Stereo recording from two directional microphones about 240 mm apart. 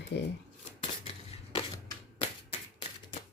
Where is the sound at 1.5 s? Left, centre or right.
Centre.